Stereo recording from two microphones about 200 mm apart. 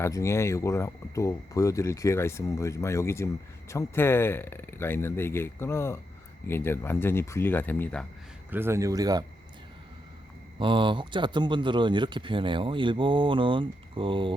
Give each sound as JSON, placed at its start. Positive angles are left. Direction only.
{"t": 0.0, "sound": "speech", "side_deg": 15}
{"t": 8.4, "sound": "speech", "side_deg": -10}
{"t": 10.6, "sound": "speech", "side_deg": -25}